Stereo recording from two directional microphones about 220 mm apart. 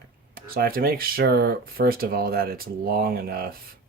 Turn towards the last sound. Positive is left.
turn(degrees=-45)  # may be behind; listen again after turning